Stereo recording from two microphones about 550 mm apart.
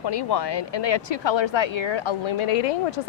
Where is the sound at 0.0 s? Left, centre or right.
Left.